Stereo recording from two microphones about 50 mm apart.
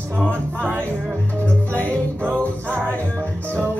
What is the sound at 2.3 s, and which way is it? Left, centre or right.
Music, left.